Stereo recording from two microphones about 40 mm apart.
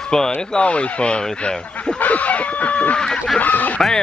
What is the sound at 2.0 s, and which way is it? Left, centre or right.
Fowl, left.